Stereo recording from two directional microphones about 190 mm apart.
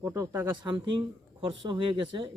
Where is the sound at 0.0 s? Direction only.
15° right (ahead or behind).